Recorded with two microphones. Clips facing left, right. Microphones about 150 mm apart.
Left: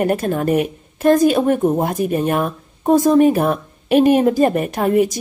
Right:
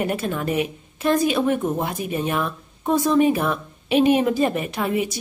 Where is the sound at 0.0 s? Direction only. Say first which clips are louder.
Left 6 dB; 40° left (ahead or behind).